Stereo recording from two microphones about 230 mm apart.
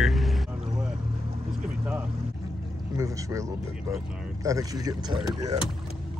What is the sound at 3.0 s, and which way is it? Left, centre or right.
Speech, centre.